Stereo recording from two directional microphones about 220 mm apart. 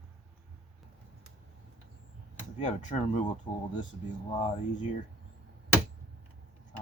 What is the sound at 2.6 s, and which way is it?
Speech, 35° left (ahead or behind).